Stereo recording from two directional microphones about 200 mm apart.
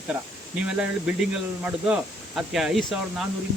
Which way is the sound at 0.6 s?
5° right (ahead or behind).